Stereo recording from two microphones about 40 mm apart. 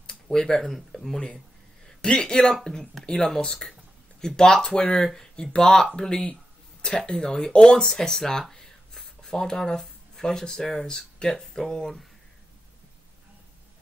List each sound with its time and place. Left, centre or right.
0.0 s speech: centre
1.1 s speech: centre
3.1 s speech: centre